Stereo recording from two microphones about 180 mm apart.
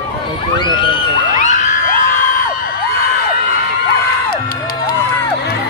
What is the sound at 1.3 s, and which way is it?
Crowd, 45° left (ahead or behind).